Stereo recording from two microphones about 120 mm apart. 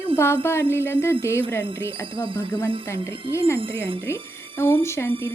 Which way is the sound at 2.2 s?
45° right (ahead or behind).